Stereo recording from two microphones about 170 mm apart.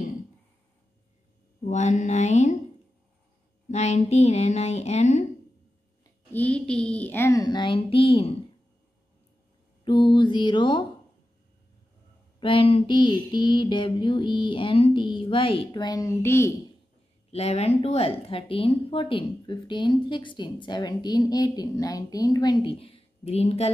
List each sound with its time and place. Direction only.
1.7 s mantra: 45° left (ahead or behind)
3.6 s speech: 40° left (ahead or behind)
6.3 s a woman's voice: 10° left (ahead or behind); by 8.4 s 30° left (ahead or behind)
9.8 s a woman's voice: 25° left (ahead or behind)
12.4 s a woman's voice: 30° left (ahead or behind); by 16.5 s 15° left (ahead or behind)
17.3 s a woman's voice: 35° left (ahead or behind)